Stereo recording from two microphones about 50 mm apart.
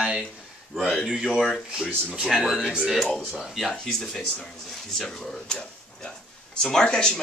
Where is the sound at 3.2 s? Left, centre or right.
Centre.